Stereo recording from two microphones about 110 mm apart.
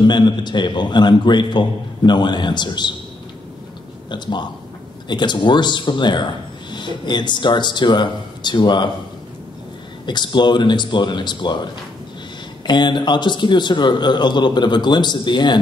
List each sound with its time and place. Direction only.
0.0 s a man's voice: 45° left (ahead or behind)
4.1 s a man's voice: 45° left (ahead or behind)
10.0 s a man's voice: 45° left (ahead or behind)